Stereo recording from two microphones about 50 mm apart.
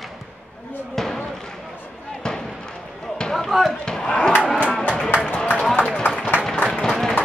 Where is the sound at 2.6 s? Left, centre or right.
Centre.